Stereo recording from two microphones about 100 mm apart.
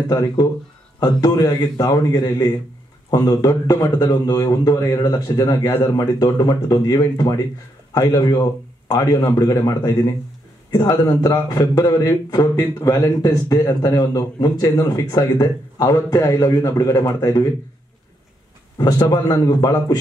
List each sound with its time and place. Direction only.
0.9 s a man's voice: 40° left (ahead or behind)
10.7 s a man's voice: 45° left (ahead or behind)
18.8 s a man's voice: 45° left (ahead or behind)